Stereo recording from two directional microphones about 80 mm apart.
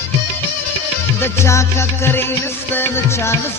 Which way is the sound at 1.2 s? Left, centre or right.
Left.